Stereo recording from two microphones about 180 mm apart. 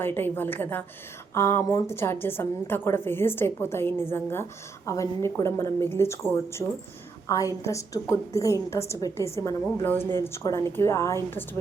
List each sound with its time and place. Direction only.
0.0 s a woman's voice: 10° left (ahead or behind)